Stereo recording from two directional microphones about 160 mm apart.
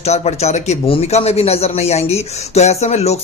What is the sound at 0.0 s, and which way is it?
A man's voice, 45° left (ahead or behind).